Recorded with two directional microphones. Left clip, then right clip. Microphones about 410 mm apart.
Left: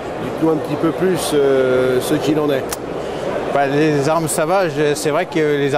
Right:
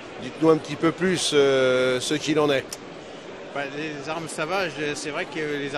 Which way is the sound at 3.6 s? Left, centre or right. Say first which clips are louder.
Left 14 dB; left.